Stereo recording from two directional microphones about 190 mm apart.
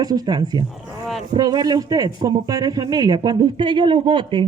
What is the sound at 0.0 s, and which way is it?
Speech, 20° right (ahead or behind).